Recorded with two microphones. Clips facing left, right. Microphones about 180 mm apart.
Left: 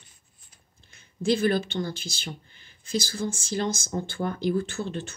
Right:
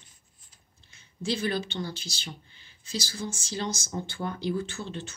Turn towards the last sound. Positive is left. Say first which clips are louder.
# left 4 dB
turn(degrees=50)  # may be behind; listen again after turning